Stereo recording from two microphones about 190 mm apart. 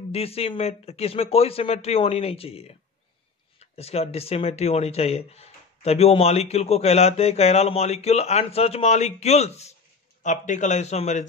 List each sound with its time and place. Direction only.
0.1 s speech: 30° left (ahead or behind)